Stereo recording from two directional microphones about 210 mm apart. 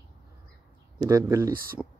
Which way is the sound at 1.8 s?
5° right (ahead or behind).